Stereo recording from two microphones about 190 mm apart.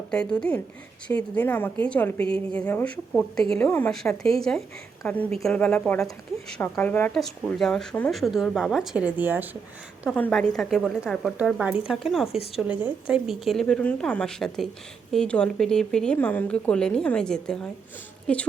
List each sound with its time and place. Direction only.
0.1 s a woman's voice: 5° left (ahead or behind)
10.2 s a woman's voice: 5° left (ahead or behind)